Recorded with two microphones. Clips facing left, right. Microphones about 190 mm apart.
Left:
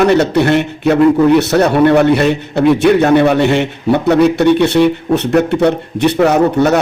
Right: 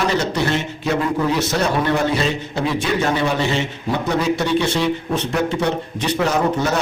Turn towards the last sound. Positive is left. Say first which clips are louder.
# left 8 dB
turn(degrees=65)  # may be behind; listen again after turning